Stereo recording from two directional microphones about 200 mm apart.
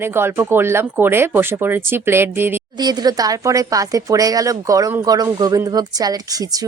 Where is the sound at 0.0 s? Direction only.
10° right (ahead or behind).